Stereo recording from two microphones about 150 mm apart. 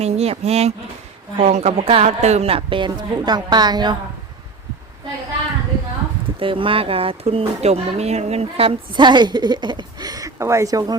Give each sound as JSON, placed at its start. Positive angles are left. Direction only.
{"t": 0.0, "sound": "speech", "side_deg": -45}
{"t": 6.4, "sound": "speech", "side_deg": -35}